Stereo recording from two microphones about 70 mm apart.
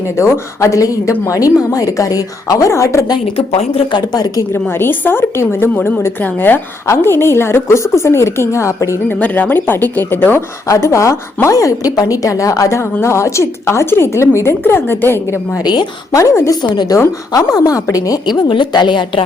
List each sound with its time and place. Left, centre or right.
0.2 s a woman's voice: left
3.9 s a woman's voice: left
4.7 s a woman's voice: left
9.0 s speech: left
10.7 s a woman's voice: left
15.6 s a woman's voice: left
16.1 s a woman's voice: left
16.5 s a woman's voice: left
17.3 s a woman's voice: left